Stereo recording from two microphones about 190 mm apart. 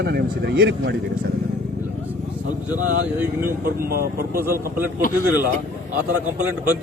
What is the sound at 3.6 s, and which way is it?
Speech, 50° right (ahead or behind).